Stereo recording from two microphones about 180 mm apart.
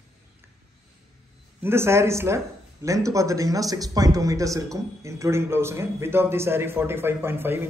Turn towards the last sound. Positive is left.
turn(degrees=-10)  # may be behind; listen again after turning